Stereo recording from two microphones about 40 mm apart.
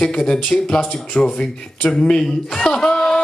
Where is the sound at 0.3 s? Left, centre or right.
Left.